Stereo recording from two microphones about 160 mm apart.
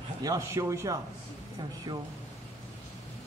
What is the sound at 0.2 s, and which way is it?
Speech, 20° right (ahead or behind).